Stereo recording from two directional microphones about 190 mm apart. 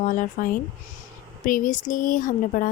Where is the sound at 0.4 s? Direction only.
45° left (ahead or behind).